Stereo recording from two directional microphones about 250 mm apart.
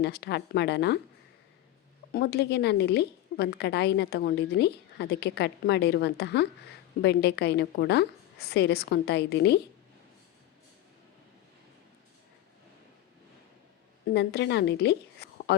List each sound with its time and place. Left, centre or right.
0.0 s a woman's voice: left
2.1 s a woman's voice: left
14.1 s a woman's voice: left